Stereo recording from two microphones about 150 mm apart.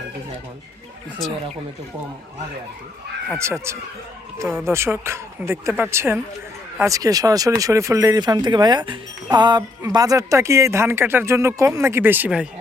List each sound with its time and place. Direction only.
3.3 s speech: 20° right (ahead or behind)